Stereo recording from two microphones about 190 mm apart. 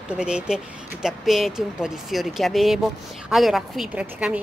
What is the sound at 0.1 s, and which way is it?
A woman's voice, 5° right (ahead or behind).